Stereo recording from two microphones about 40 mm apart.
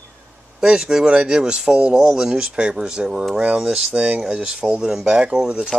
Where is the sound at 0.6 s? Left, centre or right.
Centre.